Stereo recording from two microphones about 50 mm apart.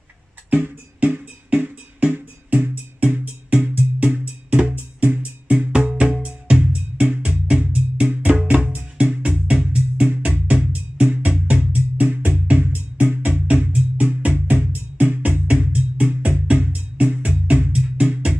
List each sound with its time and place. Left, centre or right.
0.5 s music: right
9.2 s music: centre
17.7 s music: right